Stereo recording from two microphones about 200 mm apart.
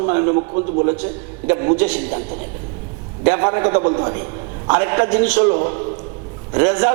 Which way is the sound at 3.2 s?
25° right (ahead or behind).